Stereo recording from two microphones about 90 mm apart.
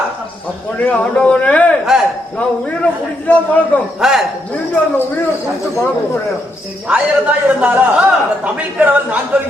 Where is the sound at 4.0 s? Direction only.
5° right (ahead or behind).